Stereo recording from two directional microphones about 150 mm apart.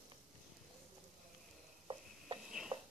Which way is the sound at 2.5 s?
5° right (ahead or behind).